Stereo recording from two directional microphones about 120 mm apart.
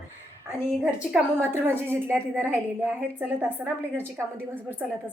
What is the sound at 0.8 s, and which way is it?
A woman's voice, 10° right (ahead or behind).